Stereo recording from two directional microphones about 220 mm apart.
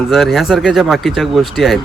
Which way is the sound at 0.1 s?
Centre (ahead or behind).